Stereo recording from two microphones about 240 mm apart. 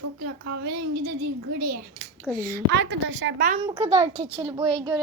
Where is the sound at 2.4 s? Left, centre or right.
Right.